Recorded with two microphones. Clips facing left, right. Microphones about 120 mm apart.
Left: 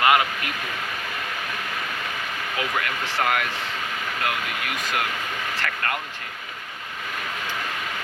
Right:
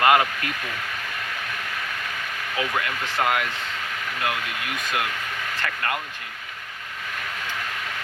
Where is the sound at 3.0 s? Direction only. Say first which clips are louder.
Right 1 dB; 20° right (ahead or behind).